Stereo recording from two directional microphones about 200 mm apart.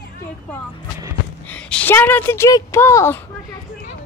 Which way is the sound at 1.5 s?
5° left (ahead or behind).